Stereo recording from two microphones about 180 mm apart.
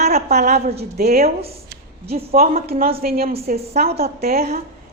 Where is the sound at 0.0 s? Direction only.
40° right (ahead or behind).